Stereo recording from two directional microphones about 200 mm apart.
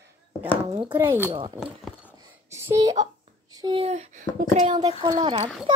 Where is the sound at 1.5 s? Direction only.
5° right (ahead or behind).